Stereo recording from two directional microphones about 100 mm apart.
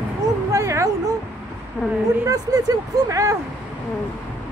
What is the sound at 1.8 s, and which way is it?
Speech, 15° left (ahead or behind).